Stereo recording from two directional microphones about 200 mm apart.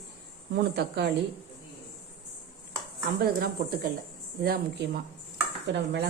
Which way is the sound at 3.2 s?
50° right (ahead or behind).